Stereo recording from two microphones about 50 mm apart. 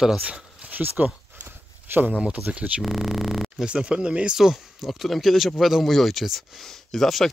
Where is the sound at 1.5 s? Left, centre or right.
Right.